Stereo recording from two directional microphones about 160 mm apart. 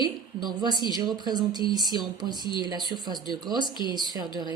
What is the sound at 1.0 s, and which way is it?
Speech, 25° right (ahead or behind).